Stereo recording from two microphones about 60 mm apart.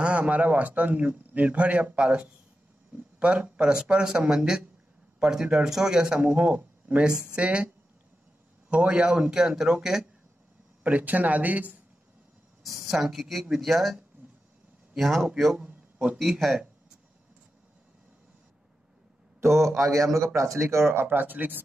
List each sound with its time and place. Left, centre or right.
0.0 s a man's voice: right
10.8 s a man's voice: right
12.6 s speech: centre
15.0 s speech: centre
15.5 s a sound: centre
16.2 s speech: centre
19.4 s speech: right
19.8 s speech: right
20.9 s speech: right